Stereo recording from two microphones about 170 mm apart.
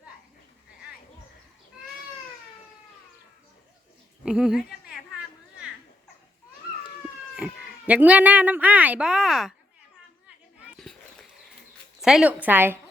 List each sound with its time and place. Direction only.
4.3 s speech: 5° right (ahead or behind)
7.3 s speech: 5° right (ahead or behind)
10.8 s a sound: centre (ahead or behind)
12.0 s a woman's voice: 5° right (ahead or behind)